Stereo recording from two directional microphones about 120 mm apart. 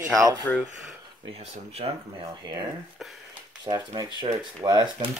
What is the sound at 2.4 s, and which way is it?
Speech, 35° right (ahead or behind).